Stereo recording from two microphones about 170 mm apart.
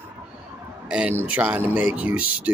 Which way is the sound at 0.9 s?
10° right (ahead or behind).